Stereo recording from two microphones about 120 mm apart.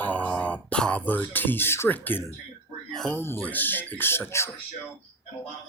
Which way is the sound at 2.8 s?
5° left (ahead or behind).